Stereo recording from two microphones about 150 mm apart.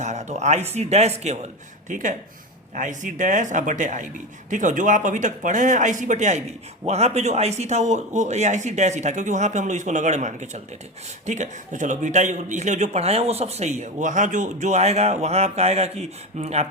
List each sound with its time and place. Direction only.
0.0 s a man's voice: 50° right (ahead or behind)
1.9 s a man's voice: 60° right (ahead or behind)